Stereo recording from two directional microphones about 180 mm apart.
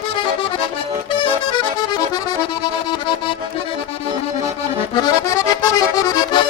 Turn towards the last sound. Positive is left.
turn(degrees=25)  # may be behind; listen again after turning